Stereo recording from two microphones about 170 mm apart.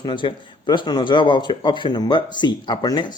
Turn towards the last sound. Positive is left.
turn(degrees=25)  # may be behind; listen again after turning